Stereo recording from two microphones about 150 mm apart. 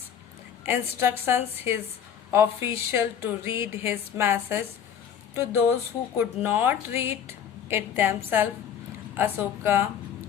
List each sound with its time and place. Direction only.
0.6 s a woman's voice: 15° right (ahead or behind)